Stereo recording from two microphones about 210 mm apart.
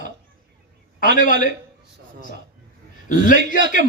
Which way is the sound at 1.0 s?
40° left (ahead or behind).